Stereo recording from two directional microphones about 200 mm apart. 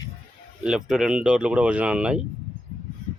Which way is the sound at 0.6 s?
5° right (ahead or behind).